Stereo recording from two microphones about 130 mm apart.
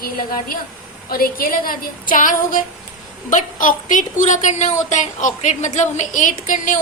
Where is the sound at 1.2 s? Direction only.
90° left.